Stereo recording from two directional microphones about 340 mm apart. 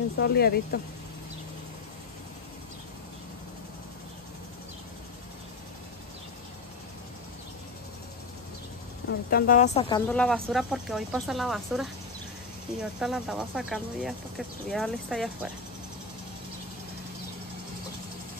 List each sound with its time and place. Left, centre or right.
0.2 s speech: left
9.3 s speech: left; by 15.5 s centre